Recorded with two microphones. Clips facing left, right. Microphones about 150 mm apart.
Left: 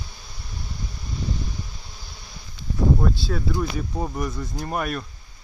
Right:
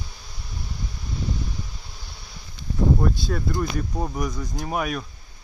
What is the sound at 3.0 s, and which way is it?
Speech, centre (ahead or behind).